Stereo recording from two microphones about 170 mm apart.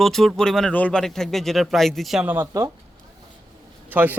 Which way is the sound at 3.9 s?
10° right (ahead or behind).